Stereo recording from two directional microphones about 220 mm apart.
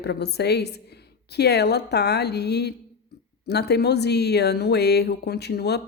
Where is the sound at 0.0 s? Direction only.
50° left (ahead or behind).